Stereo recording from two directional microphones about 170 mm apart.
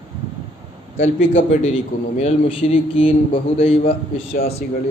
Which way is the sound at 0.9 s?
40° left (ahead or behind).